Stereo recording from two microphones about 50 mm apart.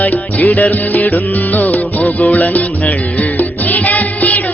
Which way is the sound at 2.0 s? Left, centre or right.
Centre.